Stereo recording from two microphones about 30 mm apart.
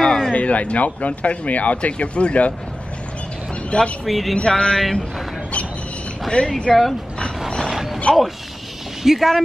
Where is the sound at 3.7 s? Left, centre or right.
Left.